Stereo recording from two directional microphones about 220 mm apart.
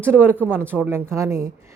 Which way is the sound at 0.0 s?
10° right (ahead or behind).